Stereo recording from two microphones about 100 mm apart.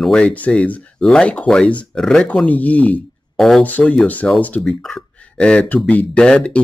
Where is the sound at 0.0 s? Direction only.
10° left (ahead or behind).